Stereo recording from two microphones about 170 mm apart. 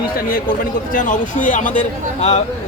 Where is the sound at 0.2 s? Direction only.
55° left (ahead or behind).